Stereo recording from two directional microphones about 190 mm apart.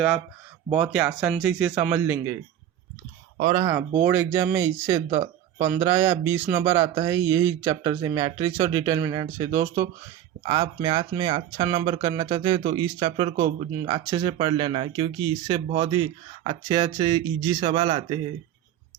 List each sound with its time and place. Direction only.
0.7 s speech: 5° right (ahead or behind)
3.4 s speech: 25° right (ahead or behind)
3.8 s speech: 10° right (ahead or behind)
17.6 s speech: 35° right (ahead or behind)